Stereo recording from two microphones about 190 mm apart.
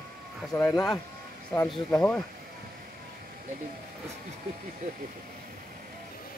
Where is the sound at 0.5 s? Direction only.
15° left (ahead or behind).